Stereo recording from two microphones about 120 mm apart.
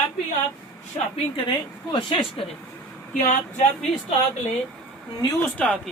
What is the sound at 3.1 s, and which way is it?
Speech, 90° left.